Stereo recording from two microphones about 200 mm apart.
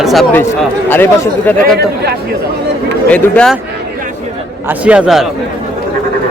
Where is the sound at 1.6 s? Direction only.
55° right (ahead or behind).